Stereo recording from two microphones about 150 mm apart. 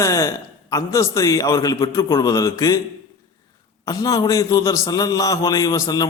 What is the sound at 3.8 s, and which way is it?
A man's voice, 25° left (ahead or behind).